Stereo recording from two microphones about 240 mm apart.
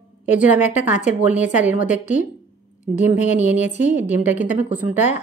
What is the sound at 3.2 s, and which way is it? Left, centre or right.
Speech, left.